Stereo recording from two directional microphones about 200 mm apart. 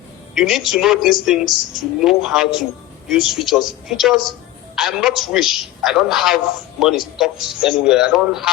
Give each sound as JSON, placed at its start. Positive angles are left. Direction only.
{"t": 0.3, "sound": "a man's voice", "side_deg": 0}